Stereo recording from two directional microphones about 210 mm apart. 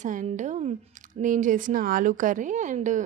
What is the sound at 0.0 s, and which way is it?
Speech, 35° right (ahead or behind).